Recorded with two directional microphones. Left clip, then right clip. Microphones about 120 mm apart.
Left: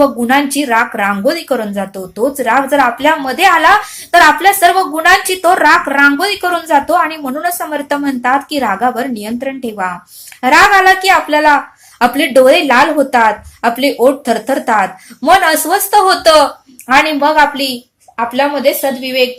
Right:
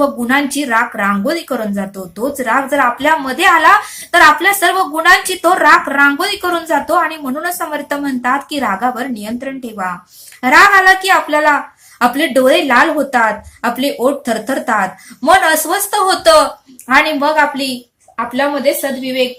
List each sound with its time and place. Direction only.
0.3 s a woman's voice: 20° left (ahead or behind)